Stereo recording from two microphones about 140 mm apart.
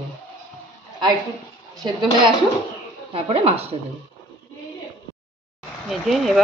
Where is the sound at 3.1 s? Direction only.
45° right (ahead or behind).